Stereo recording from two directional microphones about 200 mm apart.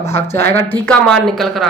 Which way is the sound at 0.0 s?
10° left (ahead or behind).